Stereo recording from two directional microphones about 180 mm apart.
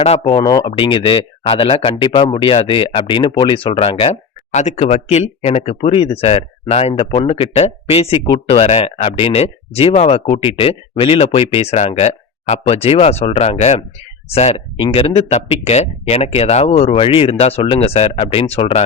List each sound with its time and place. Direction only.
0.0 s speech: 35° left (ahead or behind)
0.3 s speech: 25° left (ahead or behind)